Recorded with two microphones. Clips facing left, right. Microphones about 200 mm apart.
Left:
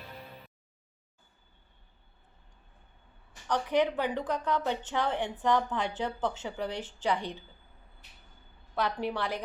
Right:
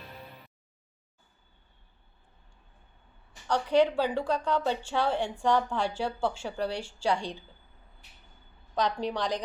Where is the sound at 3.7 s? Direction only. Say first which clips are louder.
Right 4 dB; 15° left (ahead or behind).